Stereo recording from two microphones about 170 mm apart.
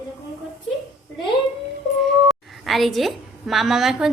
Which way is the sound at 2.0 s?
Centre (ahead or behind).